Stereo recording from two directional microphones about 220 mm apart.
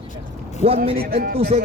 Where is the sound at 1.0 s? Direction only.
45° right (ahead or behind).